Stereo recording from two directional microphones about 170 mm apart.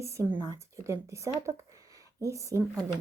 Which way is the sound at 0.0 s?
15° right (ahead or behind).